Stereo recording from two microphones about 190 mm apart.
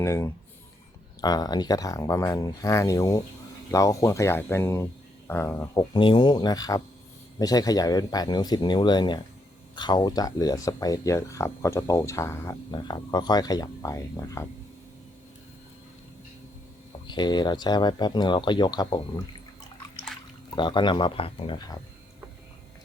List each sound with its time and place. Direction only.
0.0 s speech: 15° left (ahead or behind)
5.9 s speech: 25° left (ahead or behind)
17.1 s speech: 25° left (ahead or behind)
20.6 s speech: 25° left (ahead or behind)